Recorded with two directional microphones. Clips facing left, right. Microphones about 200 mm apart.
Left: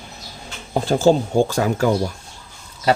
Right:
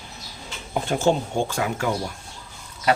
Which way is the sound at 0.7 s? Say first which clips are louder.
Left 6 dB; 35° left (ahead or behind).